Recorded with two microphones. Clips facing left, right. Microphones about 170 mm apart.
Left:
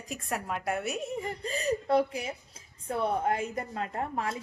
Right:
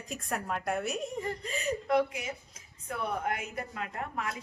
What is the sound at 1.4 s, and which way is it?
Speech, 35° left (ahead or behind).